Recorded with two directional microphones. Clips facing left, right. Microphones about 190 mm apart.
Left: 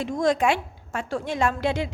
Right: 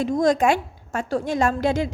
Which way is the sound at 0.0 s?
40° right (ahead or behind).